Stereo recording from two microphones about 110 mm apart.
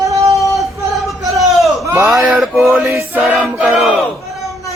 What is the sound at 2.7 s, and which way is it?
Choir, 20° right (ahead or behind).